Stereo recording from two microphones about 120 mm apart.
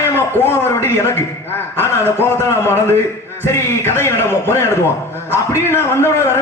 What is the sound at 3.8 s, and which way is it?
Speech, 20° left (ahead or behind).